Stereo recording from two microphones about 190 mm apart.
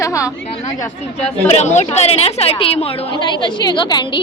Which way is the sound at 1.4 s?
35° left (ahead or behind).